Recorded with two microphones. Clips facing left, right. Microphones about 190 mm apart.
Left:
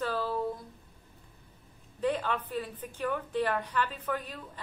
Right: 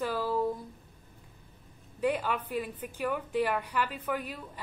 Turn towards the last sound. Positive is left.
turn(degrees=-10)  # may be behind; listen again after turning